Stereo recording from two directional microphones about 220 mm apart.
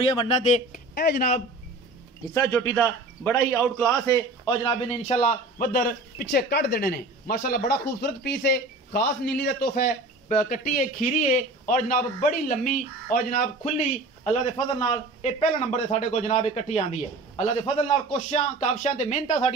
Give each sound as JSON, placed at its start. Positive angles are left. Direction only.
{"t": 0.2, "sound": "a man's voice", "side_deg": 30}
{"t": 0.9, "sound": "a man's voice", "side_deg": 45}
{"t": 2.3, "sound": "a man's voice", "side_deg": 15}
{"t": 4.0, "sound": "a man's voice", "side_deg": 15}